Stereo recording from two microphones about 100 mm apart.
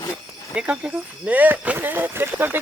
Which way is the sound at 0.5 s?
10° right (ahead or behind).